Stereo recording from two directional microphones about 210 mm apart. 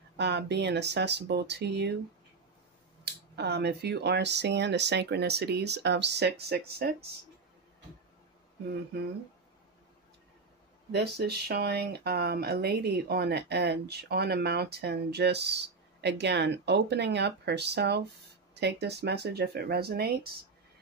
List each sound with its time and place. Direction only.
0.2 s speech: 55° right (ahead or behind)
3.3 s speech: 50° right (ahead or behind)
10.9 s speech: 50° right (ahead or behind)